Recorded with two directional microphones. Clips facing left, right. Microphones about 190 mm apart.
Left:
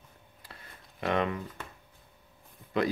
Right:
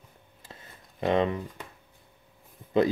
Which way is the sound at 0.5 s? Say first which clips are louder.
Right 3 dB; 25° right (ahead or behind).